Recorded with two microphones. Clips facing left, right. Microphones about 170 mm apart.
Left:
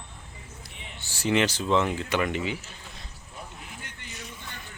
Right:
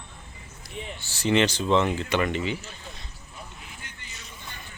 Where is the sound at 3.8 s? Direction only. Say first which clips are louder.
Left 2 dB; 60° left (ahead or behind).